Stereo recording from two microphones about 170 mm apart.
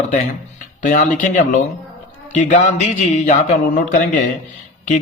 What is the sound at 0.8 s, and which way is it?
A man's voice, 45° left (ahead or behind).